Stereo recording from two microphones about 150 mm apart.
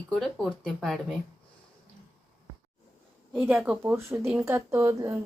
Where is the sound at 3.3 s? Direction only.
10° right (ahead or behind).